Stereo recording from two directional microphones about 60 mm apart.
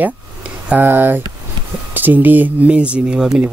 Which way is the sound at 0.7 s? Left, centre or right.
Right.